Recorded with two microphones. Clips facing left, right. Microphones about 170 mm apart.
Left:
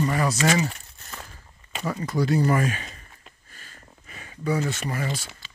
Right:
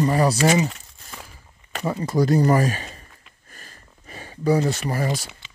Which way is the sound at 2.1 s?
40° right (ahead or behind).